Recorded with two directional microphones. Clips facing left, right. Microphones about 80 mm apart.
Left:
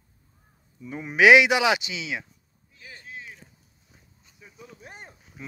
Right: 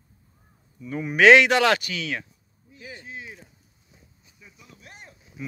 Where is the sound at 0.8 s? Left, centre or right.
Centre.